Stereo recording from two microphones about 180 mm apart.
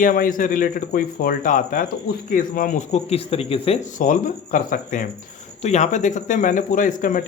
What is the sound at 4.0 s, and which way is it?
Speech, 50° left (ahead or behind).